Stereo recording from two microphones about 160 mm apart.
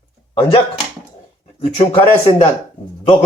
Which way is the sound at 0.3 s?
35° left (ahead or behind).